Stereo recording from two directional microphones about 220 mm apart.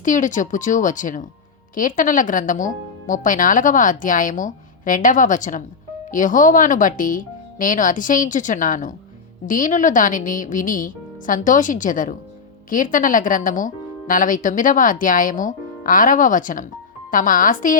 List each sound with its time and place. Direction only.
0.0 s speech: 35° left (ahead or behind)